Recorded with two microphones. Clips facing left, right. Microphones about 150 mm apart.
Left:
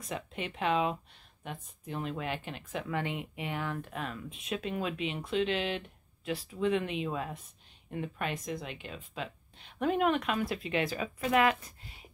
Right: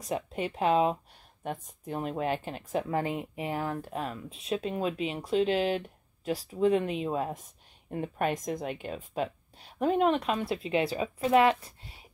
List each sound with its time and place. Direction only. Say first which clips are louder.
0.0 s speech: right 6 dB; 40° right (ahead or behind)